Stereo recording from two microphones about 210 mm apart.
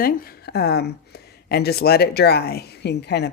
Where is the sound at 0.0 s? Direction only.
45° left (ahead or behind).